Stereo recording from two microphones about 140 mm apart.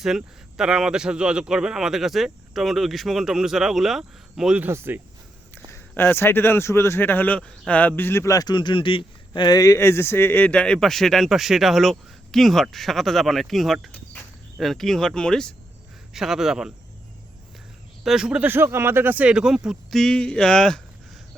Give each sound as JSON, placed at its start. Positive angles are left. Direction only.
{"t": 0.0, "sound": "a man's voice", "side_deg": -5}
{"t": 5.7, "sound": "speech", "side_deg": 15}
{"t": 14.1, "sound": "cricket", "side_deg": 5}
{"t": 16.1, "sound": "a man's voice", "side_deg": 0}
{"t": 18.0, "sound": "a man's voice", "side_deg": -5}